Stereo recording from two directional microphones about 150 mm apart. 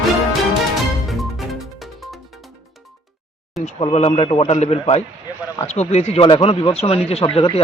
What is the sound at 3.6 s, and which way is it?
A man's voice, 45° left (ahead or behind).